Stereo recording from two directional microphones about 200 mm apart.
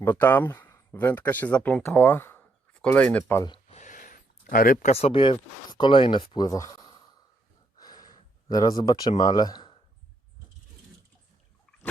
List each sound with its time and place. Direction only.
0.0 s speech: 10° left (ahead or behind)
3.7 s speech: 35° left (ahead or behind); by 7.0 s 20° left (ahead or behind)
7.8 s a sound: 20° left (ahead or behind)